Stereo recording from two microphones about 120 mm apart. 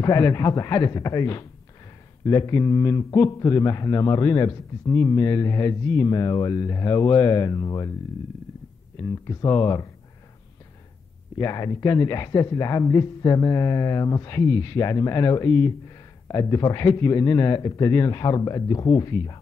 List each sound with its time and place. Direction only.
0.0 s speech: 30° left (ahead or behind)
9.0 s speech: 30° left (ahead or behind)
11.3 s speech: 30° left (ahead or behind)